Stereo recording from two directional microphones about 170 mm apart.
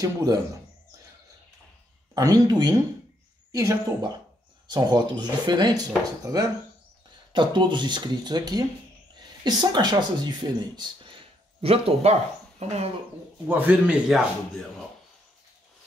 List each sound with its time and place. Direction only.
0.0 s speech: 20° right (ahead or behind)
2.1 s speech: 20° right (ahead or behind); by 12.9 s 40° right (ahead or behind)
13.5 s a man's voice: 10° right (ahead or behind)